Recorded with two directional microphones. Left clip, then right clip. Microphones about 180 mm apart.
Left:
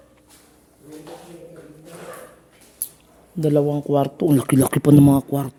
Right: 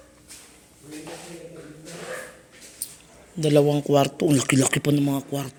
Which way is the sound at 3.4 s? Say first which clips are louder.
Even; 25° left (ahead or behind).